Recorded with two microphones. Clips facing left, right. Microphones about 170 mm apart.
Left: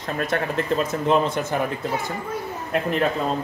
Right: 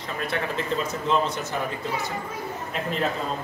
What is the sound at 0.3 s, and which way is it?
Speech, 50° left (ahead or behind).